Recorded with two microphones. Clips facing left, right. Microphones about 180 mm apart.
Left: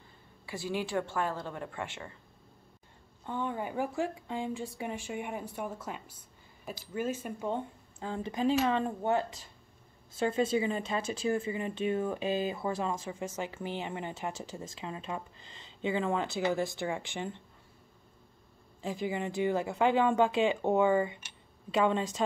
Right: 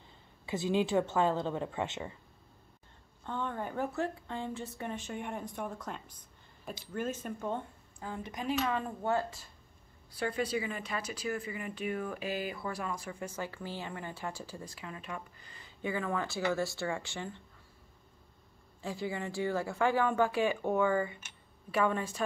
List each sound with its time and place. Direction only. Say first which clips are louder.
0.5 s speech: right 4 dB; 20° right (ahead or behind)
3.3 s speech: left 2 dB; 10° left (ahead or behind)
8.0 s a woman's voice: left 8 dB; 30° left (ahead or behind)
18.8 s a woman's voice: left 3 dB; 15° left (ahead or behind)